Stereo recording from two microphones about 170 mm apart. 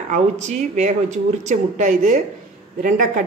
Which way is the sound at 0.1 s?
45° right (ahead or behind).